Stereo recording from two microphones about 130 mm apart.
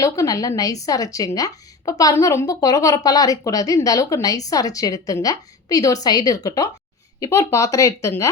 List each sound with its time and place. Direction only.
0.0 s speech: 25° left (ahead or behind)